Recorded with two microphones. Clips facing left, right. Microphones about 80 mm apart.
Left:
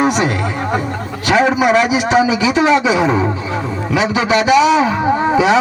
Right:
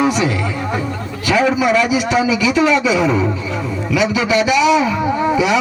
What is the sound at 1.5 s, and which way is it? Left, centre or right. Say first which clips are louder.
Speech: left 2 dB; left.